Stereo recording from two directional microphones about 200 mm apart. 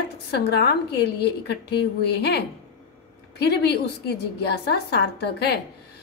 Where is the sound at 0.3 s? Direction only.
55° left (ahead or behind).